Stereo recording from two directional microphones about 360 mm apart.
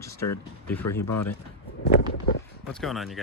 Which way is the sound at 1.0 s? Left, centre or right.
Left.